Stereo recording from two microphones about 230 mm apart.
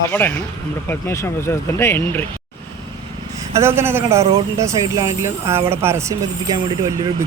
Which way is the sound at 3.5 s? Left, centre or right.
Centre.